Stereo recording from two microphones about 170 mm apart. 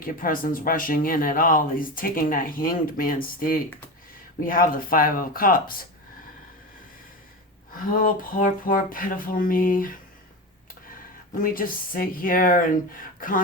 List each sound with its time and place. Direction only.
0.0 s speech: 55° left (ahead or behind)
8.0 s speech: 55° left (ahead or behind)
11.4 s speech: 55° left (ahead or behind)